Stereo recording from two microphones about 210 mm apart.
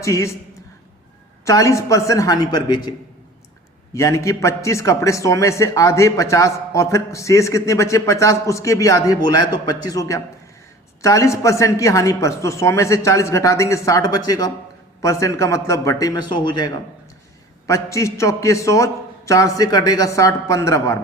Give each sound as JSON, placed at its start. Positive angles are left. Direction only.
{"t": 0.0, "sound": "a man's voice", "side_deg": 15}
{"t": 1.5, "sound": "a man's voice", "side_deg": 15}
{"t": 3.9, "sound": "a man's voice", "side_deg": 15}
{"t": 17.7, "sound": "a man's voice", "side_deg": 15}